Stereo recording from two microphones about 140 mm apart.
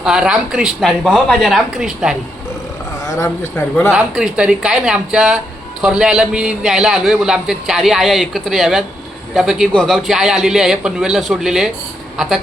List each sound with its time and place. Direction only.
0.0 s a man's voice: 5° right (ahead or behind)
3.2 s speech: 15° left (ahead or behind)
3.9 s a man's voice: 5° right (ahead or behind)